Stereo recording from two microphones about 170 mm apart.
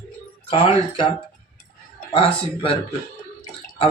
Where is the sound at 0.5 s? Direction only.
30° left (ahead or behind).